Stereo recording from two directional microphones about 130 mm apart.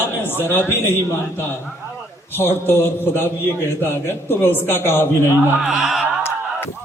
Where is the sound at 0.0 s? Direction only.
15° left (ahead or behind).